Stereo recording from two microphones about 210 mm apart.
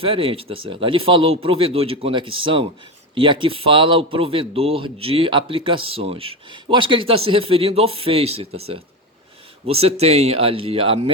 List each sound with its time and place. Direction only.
0.0 s a man's voice: 25° right (ahead or behind)
9.6 s a man's voice: 30° right (ahead or behind)